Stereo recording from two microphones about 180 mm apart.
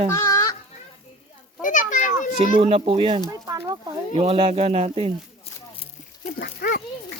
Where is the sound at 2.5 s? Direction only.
30° right (ahead or behind).